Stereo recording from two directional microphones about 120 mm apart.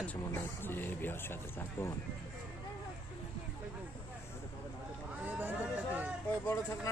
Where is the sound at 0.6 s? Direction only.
15° left (ahead or behind).